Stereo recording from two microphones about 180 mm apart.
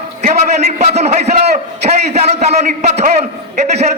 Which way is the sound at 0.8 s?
35° right (ahead or behind).